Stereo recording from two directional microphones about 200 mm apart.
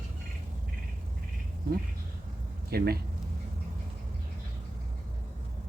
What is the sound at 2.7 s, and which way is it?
Speech, 50° right (ahead or behind).